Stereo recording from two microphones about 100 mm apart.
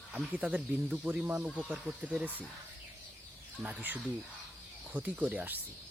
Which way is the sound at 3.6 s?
15° right (ahead or behind).